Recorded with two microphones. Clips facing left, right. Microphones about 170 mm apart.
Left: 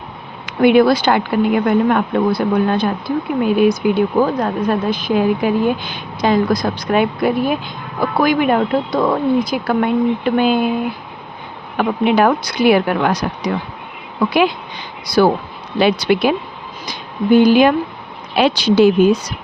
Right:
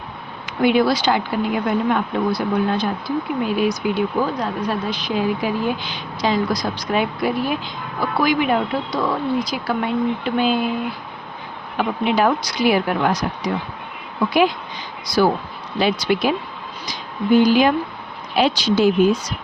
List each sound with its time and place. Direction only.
0.4 s speech: 60° left (ahead or behind)
11.8 s speech: 60° left (ahead or behind)
15.0 s speech: 65° left (ahead or behind)